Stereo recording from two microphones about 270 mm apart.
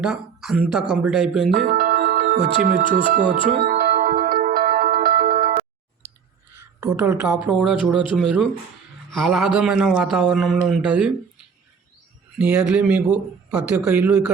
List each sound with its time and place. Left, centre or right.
0.0 s a woman's voice: centre
1.5 s speech: right
3.6 s music: right
6.6 s a woman's voice: centre
12.4 s speech: centre